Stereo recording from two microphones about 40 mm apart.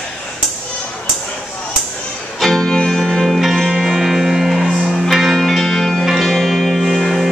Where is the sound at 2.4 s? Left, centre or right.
Centre.